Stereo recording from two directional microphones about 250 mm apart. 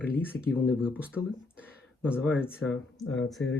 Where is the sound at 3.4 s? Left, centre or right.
Left.